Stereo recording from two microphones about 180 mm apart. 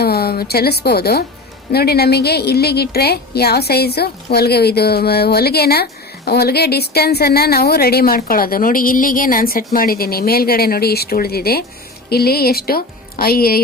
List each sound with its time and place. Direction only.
0.0 s a woman's voice: 60° left (ahead or behind)